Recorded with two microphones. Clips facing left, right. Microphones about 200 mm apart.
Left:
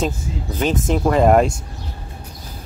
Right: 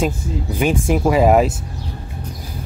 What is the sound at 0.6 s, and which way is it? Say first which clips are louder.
Speech: right 1 dB; 10° right (ahead or behind).